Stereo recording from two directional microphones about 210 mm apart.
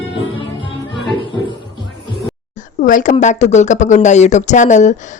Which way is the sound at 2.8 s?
40° left (ahead or behind).